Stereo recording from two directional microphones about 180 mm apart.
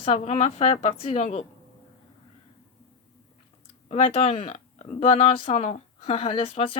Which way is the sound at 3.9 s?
35° left (ahead or behind).